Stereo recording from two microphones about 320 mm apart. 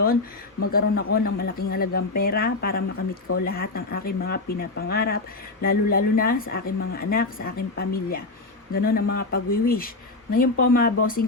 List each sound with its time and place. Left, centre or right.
0.7 s speech: left